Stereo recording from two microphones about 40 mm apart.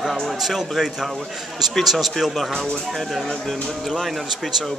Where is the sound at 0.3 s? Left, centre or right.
Centre.